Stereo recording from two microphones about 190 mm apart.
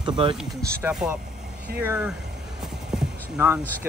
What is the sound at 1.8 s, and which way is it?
Clip-clop, 5° right (ahead or behind).